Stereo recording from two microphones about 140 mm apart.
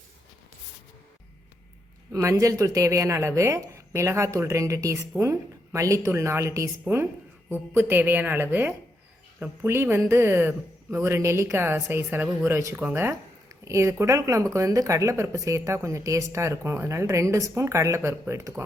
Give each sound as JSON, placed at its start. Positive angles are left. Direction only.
{"t": 2.1, "sound": "a woman's voice", "side_deg": -20}